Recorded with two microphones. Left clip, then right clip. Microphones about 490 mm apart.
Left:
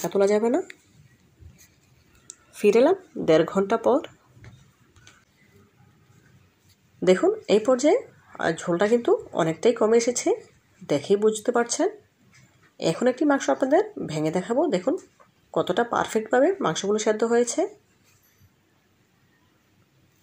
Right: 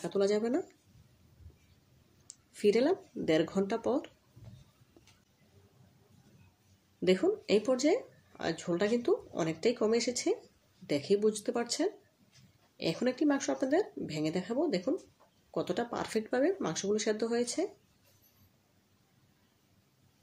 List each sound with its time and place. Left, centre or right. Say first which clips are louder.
0.0 s speech: left 9 dB; left
2.6 s speech: left 9 dB; left
7.1 s speech: left 9 dB; left